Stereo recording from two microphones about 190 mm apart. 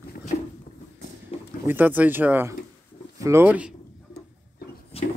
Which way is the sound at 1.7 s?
10° right (ahead or behind).